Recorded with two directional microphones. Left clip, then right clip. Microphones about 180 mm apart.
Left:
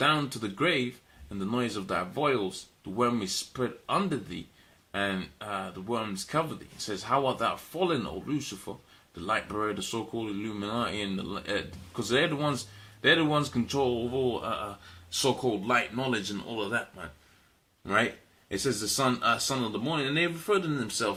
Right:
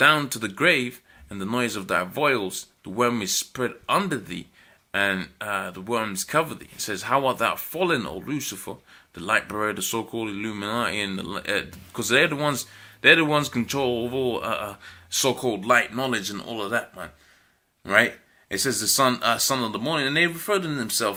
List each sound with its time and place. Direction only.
0.0 s speech: 15° right (ahead or behind)
17.8 s speech: 10° right (ahead or behind)